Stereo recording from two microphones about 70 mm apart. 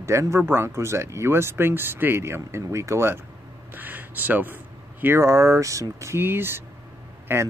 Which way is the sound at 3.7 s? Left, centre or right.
Right.